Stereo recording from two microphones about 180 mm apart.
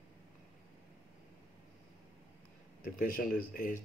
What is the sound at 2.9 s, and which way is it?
Speech, 50° left (ahead or behind).